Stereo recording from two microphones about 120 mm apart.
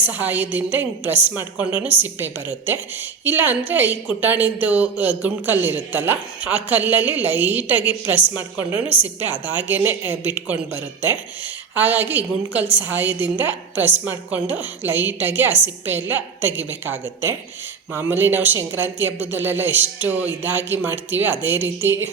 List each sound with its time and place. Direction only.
0.0 s a woman's voice: 15° right (ahead or behind)